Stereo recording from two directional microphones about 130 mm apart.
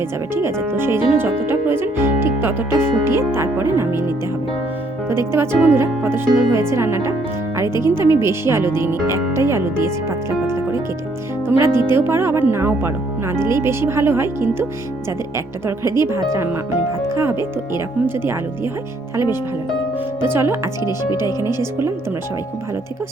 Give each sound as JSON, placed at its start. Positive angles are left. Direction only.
{"t": 0.3, "sound": "speech", "side_deg": -15}
{"t": 5.0, "sound": "speech", "side_deg": -20}
{"t": 11.4, "sound": "speech", "side_deg": -20}
{"t": 20.2, "sound": "speech", "side_deg": -20}